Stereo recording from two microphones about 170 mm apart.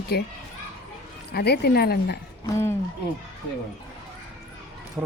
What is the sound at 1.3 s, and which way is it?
Speech, 70° left (ahead or behind).